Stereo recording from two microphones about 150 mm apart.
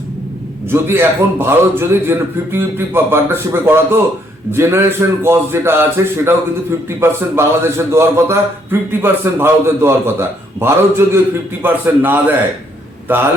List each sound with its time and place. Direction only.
0.7 s a man's voice: 15° right (ahead or behind)